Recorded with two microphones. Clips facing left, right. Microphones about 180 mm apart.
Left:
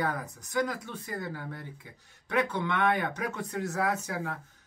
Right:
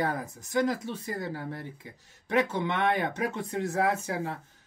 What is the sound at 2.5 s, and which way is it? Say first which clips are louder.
Speech: right 1 dB; 25° right (ahead or behind).